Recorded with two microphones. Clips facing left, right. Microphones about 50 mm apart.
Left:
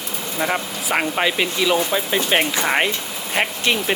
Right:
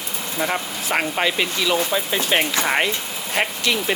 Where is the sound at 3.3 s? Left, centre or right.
Left.